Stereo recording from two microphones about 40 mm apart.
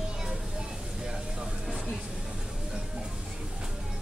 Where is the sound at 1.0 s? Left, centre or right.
Centre.